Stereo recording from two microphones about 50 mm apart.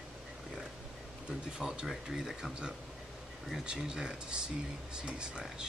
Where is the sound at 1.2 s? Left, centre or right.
Centre.